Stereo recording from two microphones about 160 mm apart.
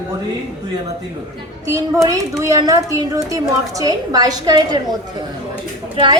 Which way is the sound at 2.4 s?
20° right (ahead or behind).